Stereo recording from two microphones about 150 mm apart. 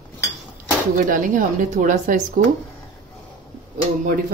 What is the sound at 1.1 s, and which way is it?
Speech, 60° right (ahead or behind).